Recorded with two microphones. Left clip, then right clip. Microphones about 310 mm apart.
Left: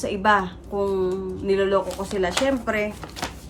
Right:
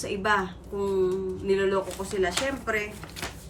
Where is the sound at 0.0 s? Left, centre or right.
Centre.